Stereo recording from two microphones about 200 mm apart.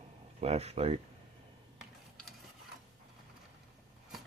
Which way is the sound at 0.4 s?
30° right (ahead or behind).